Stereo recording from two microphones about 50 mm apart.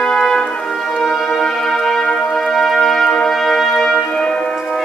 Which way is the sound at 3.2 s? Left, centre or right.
Centre.